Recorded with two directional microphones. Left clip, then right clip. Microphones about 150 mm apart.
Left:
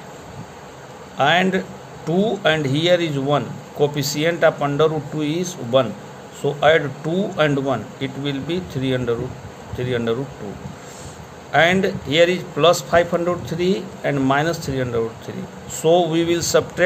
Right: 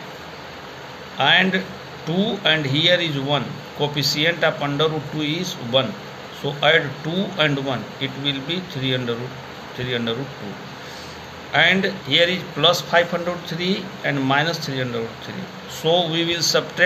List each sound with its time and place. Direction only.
1.1 s speech: 75° left (ahead or behind)
2.0 s speech: 90° left
11.5 s speech: 85° left